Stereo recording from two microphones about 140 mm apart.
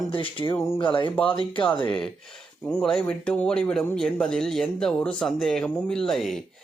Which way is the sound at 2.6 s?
5° left (ahead or behind).